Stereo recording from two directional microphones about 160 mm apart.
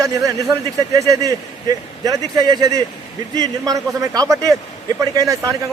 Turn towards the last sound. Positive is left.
turn(degrees=-20)  # may be behind; listen again after turning